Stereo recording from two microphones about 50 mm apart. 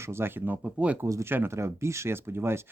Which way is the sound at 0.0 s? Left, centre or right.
Right.